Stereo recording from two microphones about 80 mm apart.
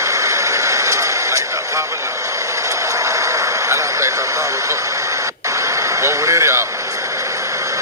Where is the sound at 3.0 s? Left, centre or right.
Right.